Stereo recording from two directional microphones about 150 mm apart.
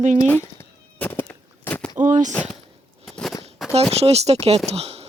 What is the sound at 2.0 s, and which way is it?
Speech, 55° right (ahead or behind).